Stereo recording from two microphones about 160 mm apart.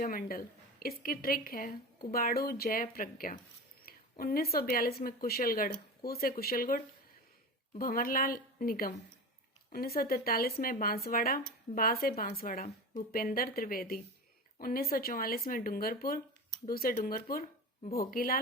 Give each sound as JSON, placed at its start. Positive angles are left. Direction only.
{"t": 0.0, "sound": "a woman's voice", "side_deg": 65}
{"t": 12.6, "sound": "speech", "side_deg": 45}
{"t": 13.1, "sound": "a woman's voice", "side_deg": 65}